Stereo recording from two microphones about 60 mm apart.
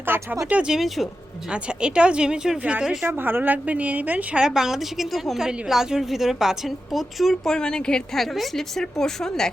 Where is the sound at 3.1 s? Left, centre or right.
Right.